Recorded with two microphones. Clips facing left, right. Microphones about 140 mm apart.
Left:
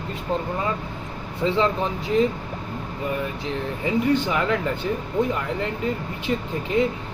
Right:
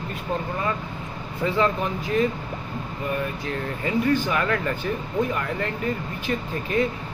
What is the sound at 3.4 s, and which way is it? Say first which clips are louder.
Speech: left 1 dB; 20° left (ahead or behind).